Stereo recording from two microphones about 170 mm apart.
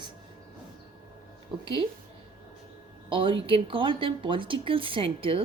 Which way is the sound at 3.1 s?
30° right (ahead or behind).